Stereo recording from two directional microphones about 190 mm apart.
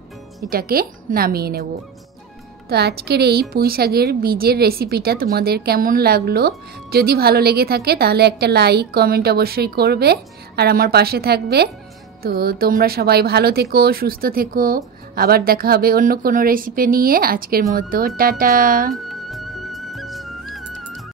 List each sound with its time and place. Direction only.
0.5 s speech: 50° right (ahead or behind)
2.7 s a woman's voice: 55° right (ahead or behind)
18.9 s music: centre (ahead or behind)